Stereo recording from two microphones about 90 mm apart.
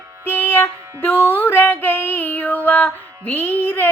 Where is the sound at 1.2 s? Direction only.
20° left (ahead or behind).